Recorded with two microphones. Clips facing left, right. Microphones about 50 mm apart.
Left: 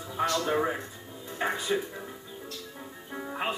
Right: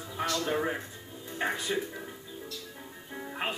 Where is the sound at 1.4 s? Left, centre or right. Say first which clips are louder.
Left 1 dB; centre.